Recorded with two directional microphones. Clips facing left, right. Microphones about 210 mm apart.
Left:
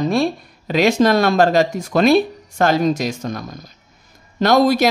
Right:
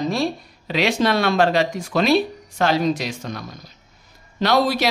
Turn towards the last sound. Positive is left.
turn(degrees=45)  # may be behind; listen again after turning